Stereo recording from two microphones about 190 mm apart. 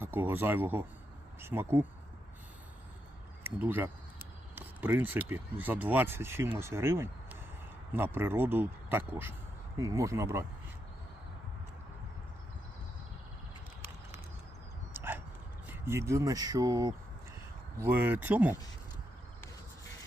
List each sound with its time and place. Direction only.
0.0 s speech: 10° right (ahead or behind)
3.4 s speech: 10° right (ahead or behind)
14.9 s dog: 10° right (ahead or behind)
15.6 s speech: 15° right (ahead or behind)